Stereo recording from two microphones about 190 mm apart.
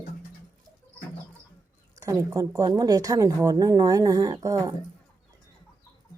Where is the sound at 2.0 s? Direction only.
15° right (ahead or behind).